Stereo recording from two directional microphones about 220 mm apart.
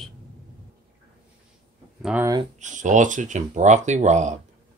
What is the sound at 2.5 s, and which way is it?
Speech, 35° right (ahead or behind).